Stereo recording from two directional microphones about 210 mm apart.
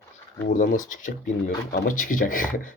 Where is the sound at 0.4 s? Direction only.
40° left (ahead or behind).